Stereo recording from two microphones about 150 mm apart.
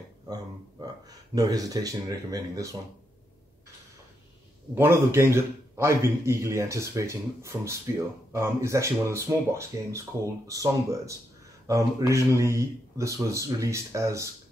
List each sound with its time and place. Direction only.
0.3 s a man's voice: 25° right (ahead or behind)
4.7 s a man's voice: 15° right (ahead or behind)